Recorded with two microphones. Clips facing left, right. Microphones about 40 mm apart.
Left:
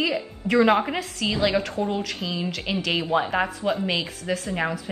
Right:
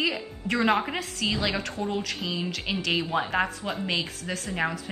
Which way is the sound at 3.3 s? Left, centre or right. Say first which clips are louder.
Left 3 dB; centre.